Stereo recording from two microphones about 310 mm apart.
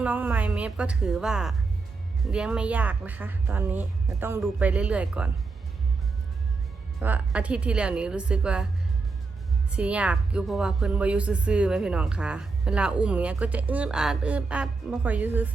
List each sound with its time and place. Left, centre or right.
0.0 s a woman's voice: centre
7.0 s a woman's voice: centre
9.7 s a woman's voice: centre